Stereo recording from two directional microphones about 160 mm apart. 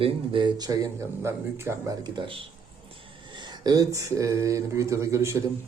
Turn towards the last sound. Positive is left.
turn(degrees=-15)  # may be behind; listen again after turning